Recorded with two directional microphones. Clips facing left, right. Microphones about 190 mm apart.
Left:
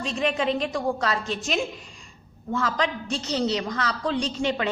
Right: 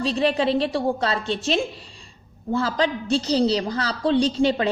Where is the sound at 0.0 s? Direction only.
35° right (ahead or behind).